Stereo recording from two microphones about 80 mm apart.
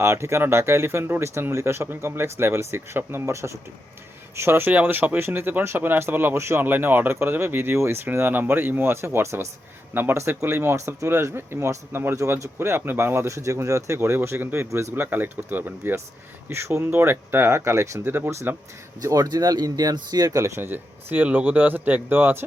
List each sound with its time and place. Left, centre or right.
0.0 s speech: right
15.0 s speech: right
19.0 s speech: right
20.4 s speech: right